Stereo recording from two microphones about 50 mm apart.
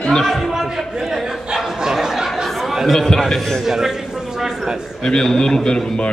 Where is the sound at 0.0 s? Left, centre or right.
Centre.